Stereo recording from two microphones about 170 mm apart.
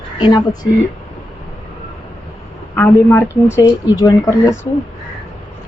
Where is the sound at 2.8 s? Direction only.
10° left (ahead or behind).